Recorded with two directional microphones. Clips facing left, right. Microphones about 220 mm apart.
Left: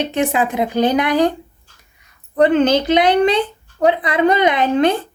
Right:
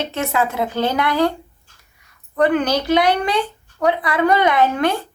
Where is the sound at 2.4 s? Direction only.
25° left (ahead or behind).